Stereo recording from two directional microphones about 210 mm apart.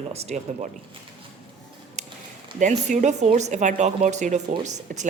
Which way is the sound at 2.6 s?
35° right (ahead or behind).